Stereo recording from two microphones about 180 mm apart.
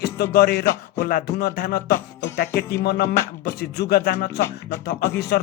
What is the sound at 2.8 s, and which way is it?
Music, 65° left (ahead or behind).